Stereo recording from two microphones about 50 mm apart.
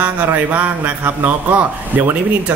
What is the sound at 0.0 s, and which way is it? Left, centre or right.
A man's voice, right.